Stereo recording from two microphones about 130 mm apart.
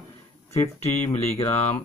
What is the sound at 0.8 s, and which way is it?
Speech, 55° left (ahead or behind).